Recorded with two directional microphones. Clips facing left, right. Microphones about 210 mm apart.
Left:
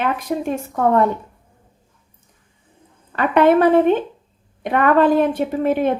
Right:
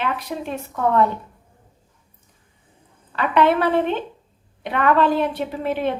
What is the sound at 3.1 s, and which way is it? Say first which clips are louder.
A woman's voice: left 4 dB; 50° left (ahead or behind).